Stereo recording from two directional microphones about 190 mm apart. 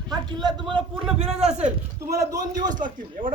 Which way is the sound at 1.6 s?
10° right (ahead or behind).